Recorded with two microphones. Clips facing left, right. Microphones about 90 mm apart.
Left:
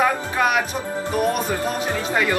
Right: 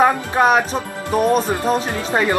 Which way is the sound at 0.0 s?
35° right (ahead or behind).